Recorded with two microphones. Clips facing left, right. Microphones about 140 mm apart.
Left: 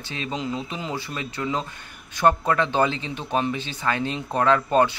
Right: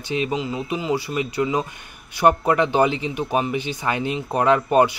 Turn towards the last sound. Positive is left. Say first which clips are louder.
# right 2 dB
turn(degrees=-15)  # may be behind; listen again after turning